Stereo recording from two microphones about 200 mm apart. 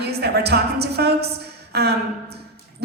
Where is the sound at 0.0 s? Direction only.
55° right (ahead or behind).